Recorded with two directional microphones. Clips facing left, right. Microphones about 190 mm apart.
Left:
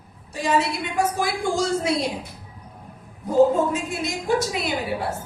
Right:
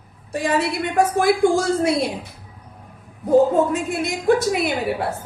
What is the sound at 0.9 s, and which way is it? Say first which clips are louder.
A woman's voice: right 7 dB; 55° right (ahead or behind).